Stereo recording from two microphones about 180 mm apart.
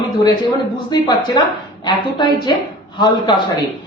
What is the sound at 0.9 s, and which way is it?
A woman's voice, 20° left (ahead or behind).